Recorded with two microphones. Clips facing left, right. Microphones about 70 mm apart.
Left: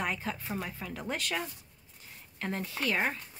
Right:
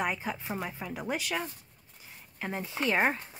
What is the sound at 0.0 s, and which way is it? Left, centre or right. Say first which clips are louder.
Speech: right 2 dB; centre.